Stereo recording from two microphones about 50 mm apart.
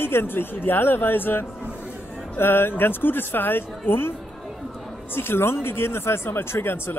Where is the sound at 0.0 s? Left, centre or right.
Left.